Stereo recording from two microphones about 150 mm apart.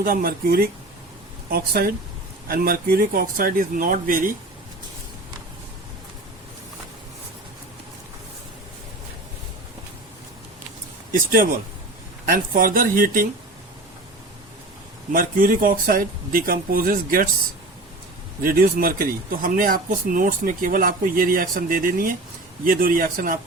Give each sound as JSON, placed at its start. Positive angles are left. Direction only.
{"t": 0.0, "sound": "speech", "side_deg": -75}
{"t": 2.5, "sound": "speech", "side_deg": -75}
{"t": 11.1, "sound": "speech", "side_deg": -70}
{"t": 15.1, "sound": "speech", "side_deg": -70}
{"t": 18.4, "sound": "speech", "side_deg": -75}